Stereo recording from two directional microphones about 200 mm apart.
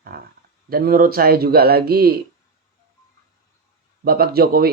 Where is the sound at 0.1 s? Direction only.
50° right (ahead or behind).